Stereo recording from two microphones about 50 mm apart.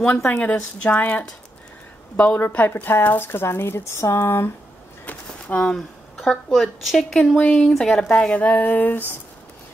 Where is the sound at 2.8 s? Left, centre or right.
Left.